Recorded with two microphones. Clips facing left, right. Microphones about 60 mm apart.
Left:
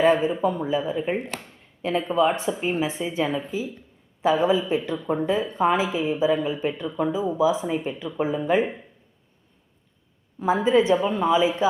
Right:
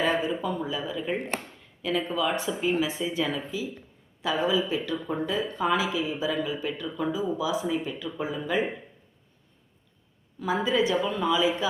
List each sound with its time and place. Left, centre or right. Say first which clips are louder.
0.0 s a man's voice: left 7 dB; left
10.4 s speech: left 5 dB; left